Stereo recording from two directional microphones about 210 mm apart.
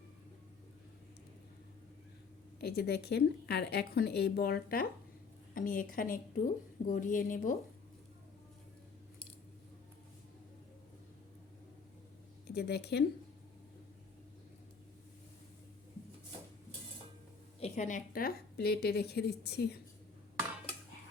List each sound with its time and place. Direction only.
2.6 s a woman's voice: 50° left (ahead or behind)
12.5 s speech: 50° left (ahead or behind)
17.6 s a woman's voice: 35° left (ahead or behind); by 19.8 s 50° left (ahead or behind)